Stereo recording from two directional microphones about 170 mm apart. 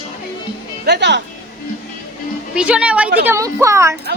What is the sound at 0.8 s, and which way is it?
Speech, 85° right.